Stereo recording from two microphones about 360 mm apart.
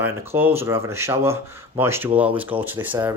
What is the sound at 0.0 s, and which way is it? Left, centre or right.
Speech, centre.